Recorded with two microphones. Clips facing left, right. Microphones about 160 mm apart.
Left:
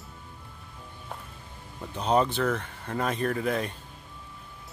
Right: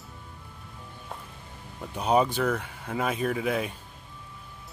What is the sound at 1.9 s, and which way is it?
Speech, 10° right (ahead or behind).